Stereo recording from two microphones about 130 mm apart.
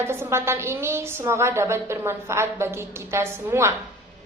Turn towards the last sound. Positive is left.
turn(degrees=-20)  # may be behind; listen again after turning